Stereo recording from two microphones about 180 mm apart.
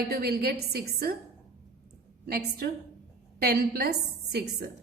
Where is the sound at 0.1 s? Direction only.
60° right (ahead or behind).